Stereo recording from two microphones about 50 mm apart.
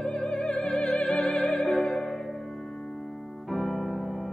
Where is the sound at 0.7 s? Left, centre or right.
Centre.